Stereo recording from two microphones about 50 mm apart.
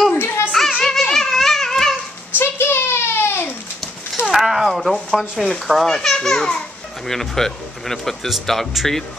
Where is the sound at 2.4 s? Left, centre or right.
Left.